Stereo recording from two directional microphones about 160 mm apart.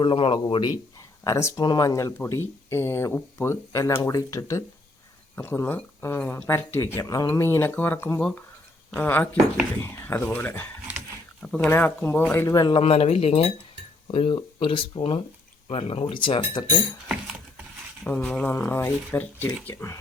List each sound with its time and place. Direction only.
0.0 s speech: 30° left (ahead or behind)
12.8 s speech: 40° left (ahead or behind)
18.0 s speech: 10° left (ahead or behind)